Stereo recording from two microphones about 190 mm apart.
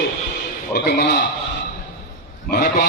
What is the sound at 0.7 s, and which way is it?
Speech, 55° left (ahead or behind).